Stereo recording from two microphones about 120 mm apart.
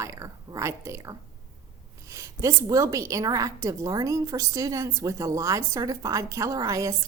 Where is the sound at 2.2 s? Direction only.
25° right (ahead or behind).